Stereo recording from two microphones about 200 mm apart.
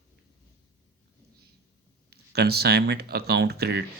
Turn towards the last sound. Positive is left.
turn(degrees=-50)  # may be behind; listen again after turning